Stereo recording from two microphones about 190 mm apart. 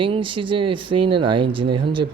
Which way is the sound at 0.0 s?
25° right (ahead or behind).